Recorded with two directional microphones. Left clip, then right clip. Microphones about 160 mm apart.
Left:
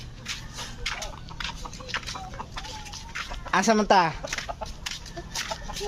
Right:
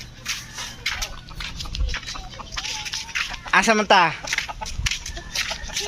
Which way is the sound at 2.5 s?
25° left (ahead or behind).